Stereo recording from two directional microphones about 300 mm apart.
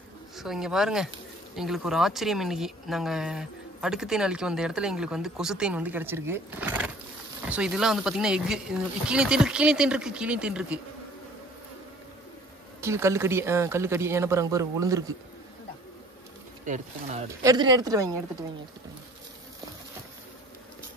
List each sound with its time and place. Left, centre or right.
0.4 s speech: centre
12.8 s speech: centre
16.6 s speech: right
17.3 s speech: centre